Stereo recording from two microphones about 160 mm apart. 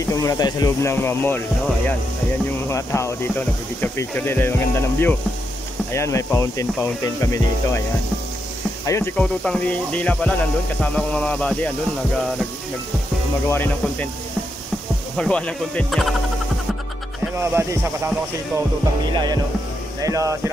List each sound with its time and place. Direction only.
0.1 s speech: 20° left (ahead or behind)
2.7 s speech: 15° left (ahead or behind)
8.8 s speech: 15° left (ahead or behind)
13.5 s speech: 10° left (ahead or behind)
15.1 s speech: 5° left (ahead or behind)
17.4 s speech: 15° right (ahead or behind)
20.0 s speech: 20° right (ahead or behind)